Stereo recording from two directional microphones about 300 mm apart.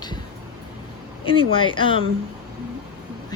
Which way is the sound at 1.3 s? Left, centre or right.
Centre.